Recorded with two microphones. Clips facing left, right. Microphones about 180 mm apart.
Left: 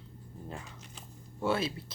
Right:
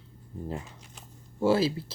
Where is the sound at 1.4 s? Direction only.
30° right (ahead or behind).